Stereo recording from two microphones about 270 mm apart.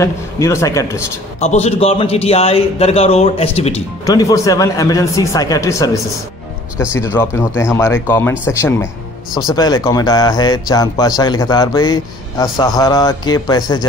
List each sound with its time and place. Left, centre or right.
0.0 s a man's voice: centre
1.4 s a man's voice: left
6.9 s a man's voice: centre